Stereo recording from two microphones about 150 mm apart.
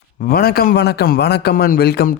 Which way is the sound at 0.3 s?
85° left.